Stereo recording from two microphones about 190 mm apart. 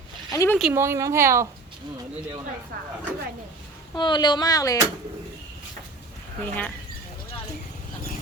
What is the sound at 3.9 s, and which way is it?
Speech, 25° left (ahead or behind).